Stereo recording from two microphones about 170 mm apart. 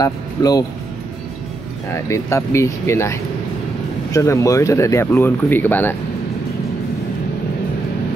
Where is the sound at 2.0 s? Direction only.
15° left (ahead or behind).